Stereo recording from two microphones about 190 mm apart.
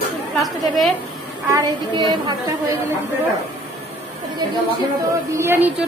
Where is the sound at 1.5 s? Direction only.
20° right (ahead or behind).